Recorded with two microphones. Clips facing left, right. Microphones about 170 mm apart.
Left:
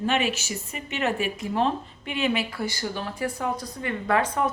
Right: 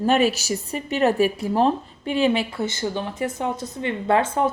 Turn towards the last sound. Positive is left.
turn(degrees=-25)  # may be behind; listen again after turning